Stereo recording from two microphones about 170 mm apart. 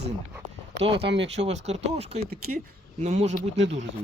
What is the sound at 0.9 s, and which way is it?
Speech, 85° right.